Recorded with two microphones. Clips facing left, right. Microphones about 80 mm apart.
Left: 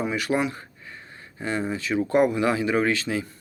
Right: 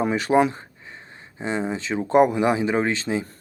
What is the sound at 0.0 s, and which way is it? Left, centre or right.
Speech, right.